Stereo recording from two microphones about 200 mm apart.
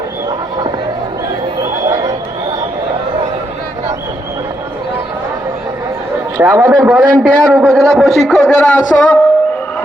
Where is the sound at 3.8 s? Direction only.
15° right (ahead or behind).